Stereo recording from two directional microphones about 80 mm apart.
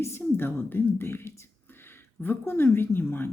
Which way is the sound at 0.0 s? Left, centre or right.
Left.